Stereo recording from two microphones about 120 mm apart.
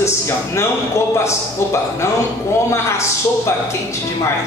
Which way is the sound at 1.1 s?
25° left (ahead or behind).